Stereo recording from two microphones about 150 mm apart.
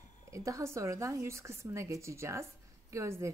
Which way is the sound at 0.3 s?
20° right (ahead or behind).